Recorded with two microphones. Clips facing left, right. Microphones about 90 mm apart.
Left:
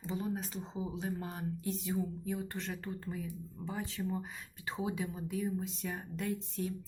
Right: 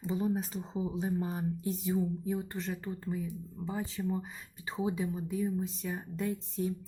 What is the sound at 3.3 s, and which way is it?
Speech, 5° right (ahead or behind).